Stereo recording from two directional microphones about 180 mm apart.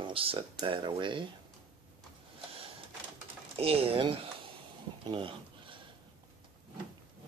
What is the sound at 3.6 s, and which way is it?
Speech, 30° right (ahead or behind).